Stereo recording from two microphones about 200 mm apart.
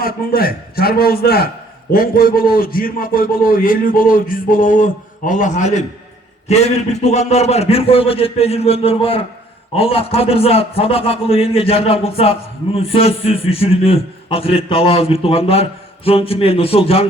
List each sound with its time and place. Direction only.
0.0 s a man's voice: 45° left (ahead or behind); by 17.1 s 30° left (ahead or behind)